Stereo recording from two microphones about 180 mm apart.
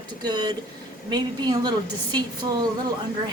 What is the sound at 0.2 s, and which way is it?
A woman's voice, 25° right (ahead or behind).